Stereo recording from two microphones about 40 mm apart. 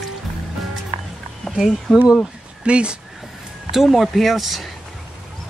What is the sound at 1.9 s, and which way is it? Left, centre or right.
Speech, centre.